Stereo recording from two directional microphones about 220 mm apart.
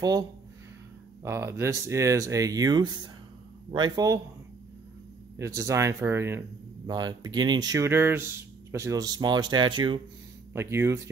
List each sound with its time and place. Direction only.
0.0 s speech: 15° right (ahead or behind)
5.4 s speech: 15° right (ahead or behind)